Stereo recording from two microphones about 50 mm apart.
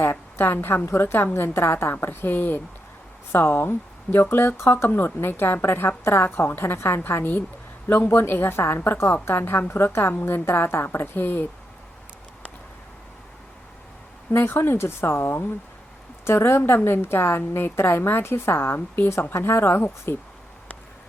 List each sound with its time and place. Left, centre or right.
0.0 s a sound: left
0.9 s speech: left
10.2 s speech: left
14.3 s speech: left
16.2 s a woman's voice: left